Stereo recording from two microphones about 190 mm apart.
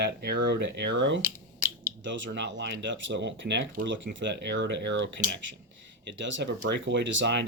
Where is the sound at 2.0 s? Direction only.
75° right (ahead or behind).